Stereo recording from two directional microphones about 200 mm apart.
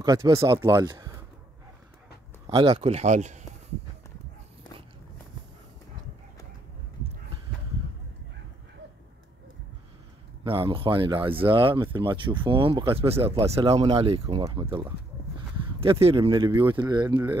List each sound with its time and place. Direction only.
0.0 s speech: 15° right (ahead or behind)
2.5 s speech: 25° right (ahead or behind)
10.4 s speech: 25° right (ahead or behind)
15.8 s speech: 30° right (ahead or behind)